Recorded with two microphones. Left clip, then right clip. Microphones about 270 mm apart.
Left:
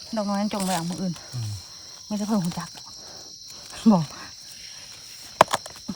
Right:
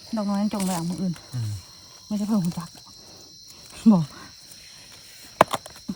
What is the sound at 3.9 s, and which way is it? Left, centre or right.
Speech, left.